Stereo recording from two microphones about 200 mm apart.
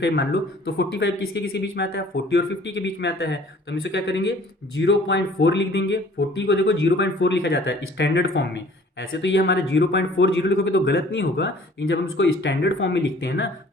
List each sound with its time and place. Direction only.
0.0 s speech: 55° left (ahead or behind)